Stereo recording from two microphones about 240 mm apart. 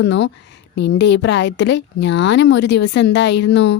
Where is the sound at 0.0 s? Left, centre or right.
Left.